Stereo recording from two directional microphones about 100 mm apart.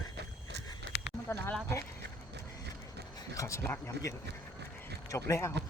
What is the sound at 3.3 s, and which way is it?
Speech, 30° left (ahead or behind).